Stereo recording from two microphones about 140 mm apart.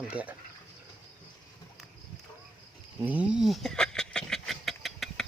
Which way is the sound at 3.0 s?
10° right (ahead or behind).